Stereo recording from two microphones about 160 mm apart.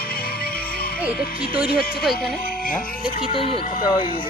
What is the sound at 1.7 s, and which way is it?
Speech, 75° left (ahead or behind).